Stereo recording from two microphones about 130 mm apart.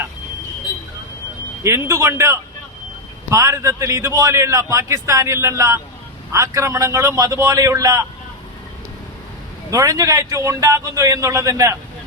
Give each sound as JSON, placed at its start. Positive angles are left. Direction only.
{"t": 1.6, "sound": "a man's voice", "side_deg": -20}
{"t": 9.6, "sound": "a man's voice", "side_deg": -25}